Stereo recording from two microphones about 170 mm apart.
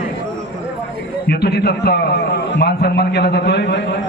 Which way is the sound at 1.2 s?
70° left (ahead or behind).